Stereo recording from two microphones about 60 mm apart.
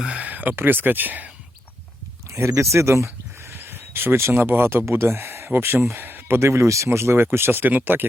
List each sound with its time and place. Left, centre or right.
0.1 s speech: right
2.6 s a sound: right
3.6 s speech: right